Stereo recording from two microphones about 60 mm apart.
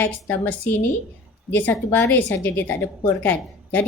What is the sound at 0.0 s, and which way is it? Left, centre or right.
A woman's voice, left.